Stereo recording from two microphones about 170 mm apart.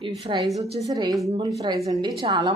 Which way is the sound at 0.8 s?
20° right (ahead or behind).